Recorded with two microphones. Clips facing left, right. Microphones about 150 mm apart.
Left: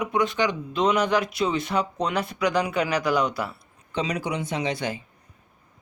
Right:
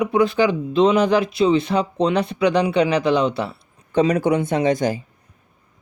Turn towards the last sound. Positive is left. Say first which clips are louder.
# right 9 dB
turn(degrees=-40)  # may be behind; listen again after turning